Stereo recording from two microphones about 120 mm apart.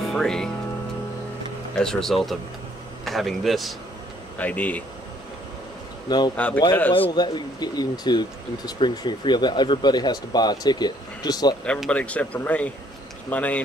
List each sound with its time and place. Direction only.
0.1 s speech: 5° left (ahead or behind)
1.8 s speech: 5° left (ahead or behind)
4.4 s speech: 15° left (ahead or behind)
6.0 s a man's voice: 35° left (ahead or behind)
6.3 s speech: 15° left (ahead or behind)
6.9 s speech: 40° left (ahead or behind)
11.9 s speech: 10° left (ahead or behind)